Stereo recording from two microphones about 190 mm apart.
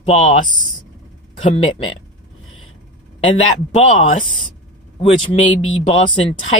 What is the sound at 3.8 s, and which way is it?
Speech, 35° left (ahead or behind).